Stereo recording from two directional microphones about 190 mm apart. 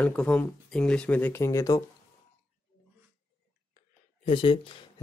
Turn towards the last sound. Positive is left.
turn(degrees=25)  # may be behind; listen again after turning